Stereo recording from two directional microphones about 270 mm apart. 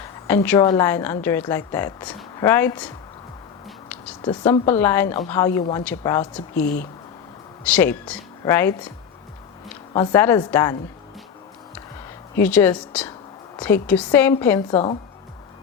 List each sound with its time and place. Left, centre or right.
0.0 s a woman's voice: centre
3.8 s a sound: centre
4.2 s a woman's voice: centre
6.5 s speech: left
7.6 s a woman's voice: centre
9.9 s a woman's voice: centre
12.4 s a woman's voice: centre